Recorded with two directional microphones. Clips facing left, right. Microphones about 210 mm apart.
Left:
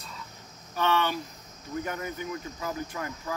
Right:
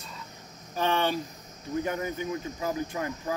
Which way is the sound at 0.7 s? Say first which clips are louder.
Even; 30° right (ahead or behind).